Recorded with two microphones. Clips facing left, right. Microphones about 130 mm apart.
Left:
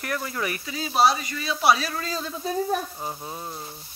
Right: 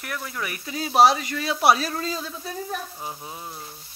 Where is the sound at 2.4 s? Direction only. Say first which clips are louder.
Left 6 dB; 20° left (ahead or behind).